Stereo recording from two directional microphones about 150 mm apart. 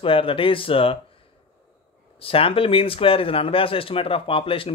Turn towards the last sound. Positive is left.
turn(degrees=35)  # may be behind; listen again after turning